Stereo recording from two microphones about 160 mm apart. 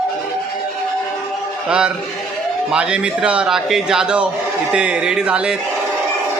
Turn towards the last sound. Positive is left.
turn(degrees=-5)  # may be behind; listen again after turning